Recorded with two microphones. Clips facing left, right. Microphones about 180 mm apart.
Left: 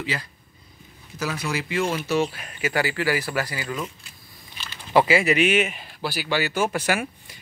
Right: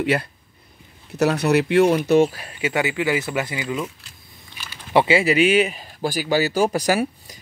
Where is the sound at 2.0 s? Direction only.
50° right (ahead or behind).